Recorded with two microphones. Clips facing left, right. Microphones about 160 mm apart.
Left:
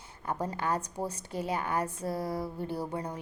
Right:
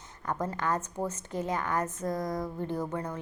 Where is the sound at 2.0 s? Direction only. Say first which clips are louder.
Right 1 dB; 30° left (ahead or behind).